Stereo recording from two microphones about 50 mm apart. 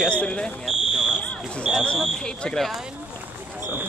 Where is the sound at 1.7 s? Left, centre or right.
Centre.